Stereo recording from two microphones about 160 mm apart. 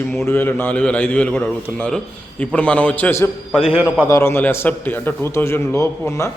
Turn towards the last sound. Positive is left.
turn(degrees=20)  # may be behind; listen again after turning